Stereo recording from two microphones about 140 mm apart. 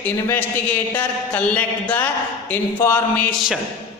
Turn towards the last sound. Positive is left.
turn(degrees=0)  # may be behind; listen again after turning